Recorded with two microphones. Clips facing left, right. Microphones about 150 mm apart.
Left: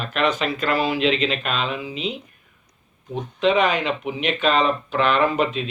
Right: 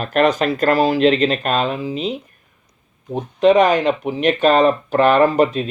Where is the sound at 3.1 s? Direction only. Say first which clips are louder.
Right 6 dB; 45° right (ahead or behind).